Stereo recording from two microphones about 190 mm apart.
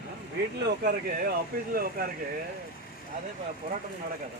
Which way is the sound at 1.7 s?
50° right (ahead or behind).